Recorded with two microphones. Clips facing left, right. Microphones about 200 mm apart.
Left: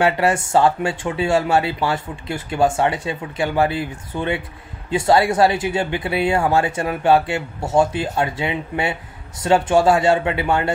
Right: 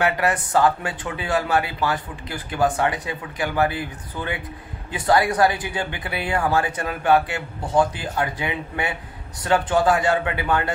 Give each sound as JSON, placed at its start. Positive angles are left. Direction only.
{"t": 0.0, "sound": "speech", "side_deg": 25}